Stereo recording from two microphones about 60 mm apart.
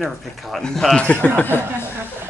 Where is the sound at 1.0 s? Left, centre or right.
Left.